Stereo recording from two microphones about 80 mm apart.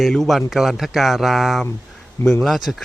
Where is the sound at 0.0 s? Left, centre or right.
Centre.